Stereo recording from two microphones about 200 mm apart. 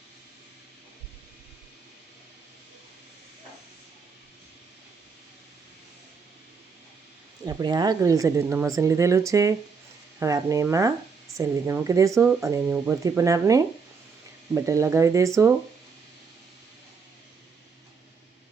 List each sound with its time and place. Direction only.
7.4 s speech: 20° right (ahead or behind)